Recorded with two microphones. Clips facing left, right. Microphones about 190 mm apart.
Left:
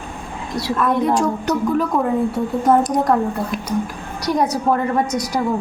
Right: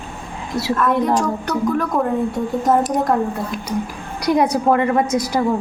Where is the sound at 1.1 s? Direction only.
10° left (ahead or behind).